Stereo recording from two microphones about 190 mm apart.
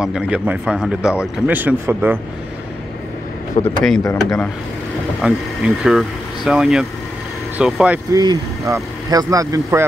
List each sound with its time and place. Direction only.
0.0 s speech: 5° right (ahead or behind)
3.6 s speech: centre (ahead or behind)
4.0 s speech: 15° left (ahead or behind)
5.2 s speech: centre (ahead or behind)
8.1 s speech: 20° right (ahead or behind)